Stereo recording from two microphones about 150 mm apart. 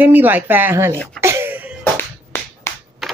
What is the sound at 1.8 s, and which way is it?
Finger snapping, 15° left (ahead or behind).